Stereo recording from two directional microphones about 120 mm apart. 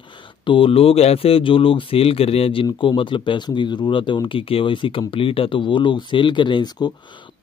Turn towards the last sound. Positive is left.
turn(degrees=40)  # may be behind; listen again after turning